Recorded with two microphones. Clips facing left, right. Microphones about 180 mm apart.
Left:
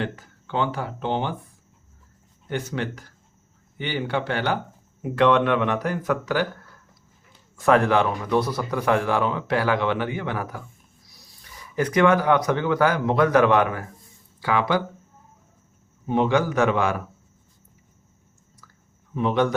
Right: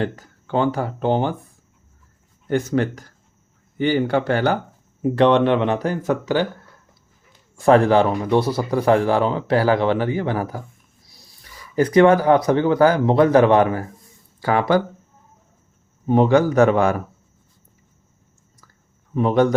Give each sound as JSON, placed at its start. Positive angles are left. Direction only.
{"t": 0.0, "sound": "speech", "side_deg": -45}
{"t": 2.5, "sound": "speech", "side_deg": -45}
{"t": 5.1, "sound": "speech", "side_deg": -30}
{"t": 7.5, "sound": "speech", "side_deg": -30}
{"t": 11.8, "sound": "speech", "side_deg": -35}
{"t": 14.4, "sound": "speech", "side_deg": -45}
{"t": 16.0, "sound": "speech", "side_deg": -40}
{"t": 18.6, "sound": "chewing", "side_deg": -45}
{"t": 19.1, "sound": "speech", "side_deg": -40}